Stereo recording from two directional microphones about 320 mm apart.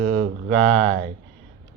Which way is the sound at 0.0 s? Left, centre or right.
Right.